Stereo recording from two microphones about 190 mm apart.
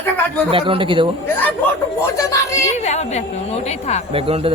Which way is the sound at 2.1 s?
15° left (ahead or behind).